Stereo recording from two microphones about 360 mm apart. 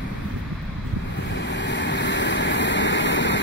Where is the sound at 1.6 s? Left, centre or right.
Left.